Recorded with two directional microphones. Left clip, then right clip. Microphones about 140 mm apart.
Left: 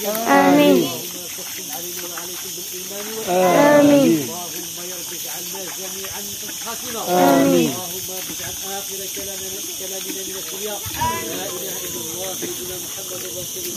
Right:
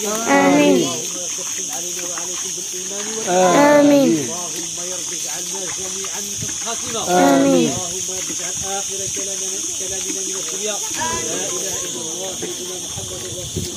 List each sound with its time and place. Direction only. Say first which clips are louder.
0.2 s speech: even; centre (ahead or behind)
3.3 s speech: right 1 dB; 25° right (ahead or behind)
7.2 s speech: right 1 dB; 35° right (ahead or behind)